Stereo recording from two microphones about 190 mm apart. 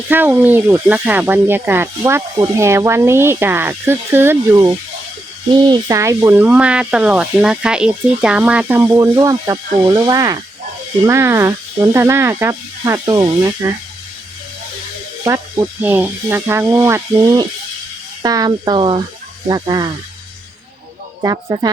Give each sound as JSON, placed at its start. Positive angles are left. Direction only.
{"t": 0.1, "sound": "speech", "side_deg": -10}
{"t": 15.8, "sound": "speech", "side_deg": -10}
{"t": 21.2, "sound": "speech", "side_deg": -20}